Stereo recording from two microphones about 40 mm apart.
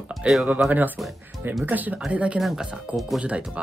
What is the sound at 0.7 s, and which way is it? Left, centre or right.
Speech, right.